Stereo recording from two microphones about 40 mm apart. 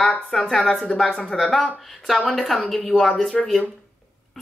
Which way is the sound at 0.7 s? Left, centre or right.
Left.